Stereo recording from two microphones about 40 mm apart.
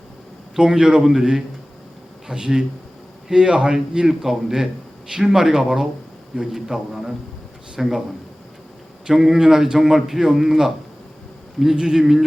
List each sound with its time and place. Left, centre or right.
0.6 s a man's voice: centre
4.1 s a man's voice: centre
9.0 s a man's voice: centre